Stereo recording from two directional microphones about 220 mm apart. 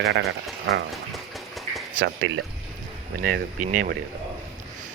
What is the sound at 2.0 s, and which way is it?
Speech, 60° right (ahead or behind).